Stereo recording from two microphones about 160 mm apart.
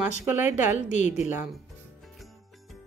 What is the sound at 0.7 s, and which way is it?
Speech, 50° left (ahead or behind).